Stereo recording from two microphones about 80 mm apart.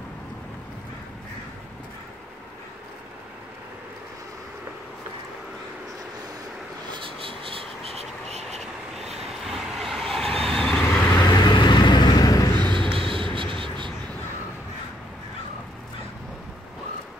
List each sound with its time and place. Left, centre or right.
8.5 s vehicle: centre
11.2 s vehicle: left
12.7 s a sound: right